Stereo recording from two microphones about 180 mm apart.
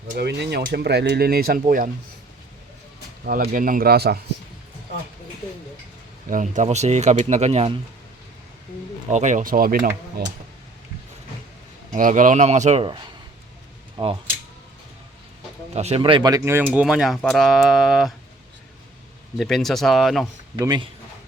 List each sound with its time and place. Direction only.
0.2 s speech: 65° right (ahead or behind)
3.2 s speech: 55° right (ahead or behind)
6.3 s speech: 45° right (ahead or behind)
9.0 s speech: 40° right (ahead or behind)
11.9 s speech: 45° right (ahead or behind); by 14.2 s 30° right (ahead or behind)
15.7 s speech: 35° right (ahead or behind); by 18.1 s centre (ahead or behind)
19.4 s speech: centre (ahead or behind)
20.6 s speech: 25° right (ahead or behind)